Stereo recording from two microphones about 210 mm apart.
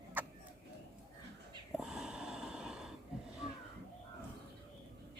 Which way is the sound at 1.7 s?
Centre (ahead or behind).